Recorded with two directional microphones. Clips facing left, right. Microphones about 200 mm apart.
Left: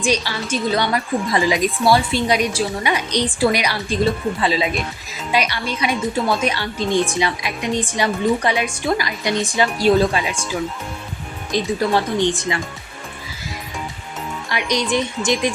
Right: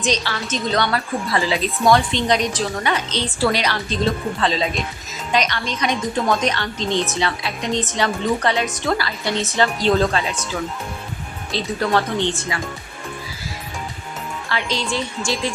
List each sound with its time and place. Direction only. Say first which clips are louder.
0.0 s speech: left 2 dB; 10° left (ahead or behind)
11.5 s speech: left 2 dB; 10° left (ahead or behind)
14.5 s speech: left 4 dB; 15° left (ahead or behind)